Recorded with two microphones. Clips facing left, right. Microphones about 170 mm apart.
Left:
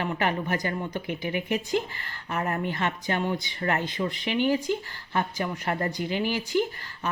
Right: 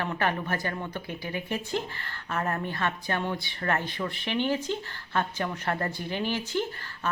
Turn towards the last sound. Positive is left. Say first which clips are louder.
# left 4 dB
turn(degrees=10)  # may be behind; listen again after turning